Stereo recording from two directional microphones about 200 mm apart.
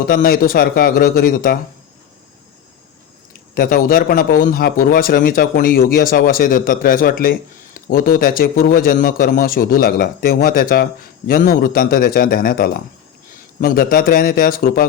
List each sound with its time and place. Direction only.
0.0 s a man's voice: 45° left (ahead or behind)
3.5 s a man's voice: 45° left (ahead or behind)